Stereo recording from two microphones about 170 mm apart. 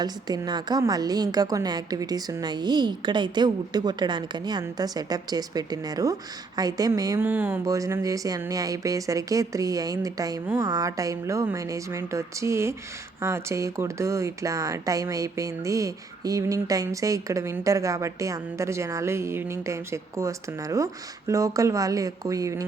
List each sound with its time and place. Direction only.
0.0 s speech: 25° right (ahead or behind)